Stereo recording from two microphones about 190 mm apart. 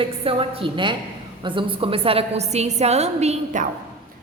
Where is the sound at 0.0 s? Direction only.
30° right (ahead or behind).